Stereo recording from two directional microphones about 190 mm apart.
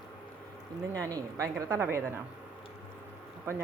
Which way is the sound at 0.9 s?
15° right (ahead or behind).